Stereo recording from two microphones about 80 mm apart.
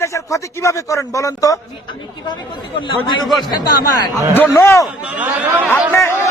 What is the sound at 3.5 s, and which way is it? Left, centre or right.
Speech, left.